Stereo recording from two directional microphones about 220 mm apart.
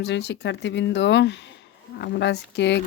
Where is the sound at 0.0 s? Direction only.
50° left (ahead or behind).